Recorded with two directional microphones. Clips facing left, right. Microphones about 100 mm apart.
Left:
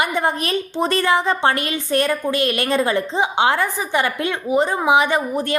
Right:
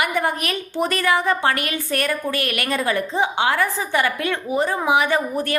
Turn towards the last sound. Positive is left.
turn(degrees=20)  # may be behind; listen again after turning